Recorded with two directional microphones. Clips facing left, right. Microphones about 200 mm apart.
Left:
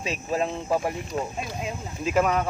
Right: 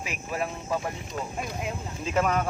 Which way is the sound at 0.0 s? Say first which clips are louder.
Left 5 dB; 30° left (ahead or behind).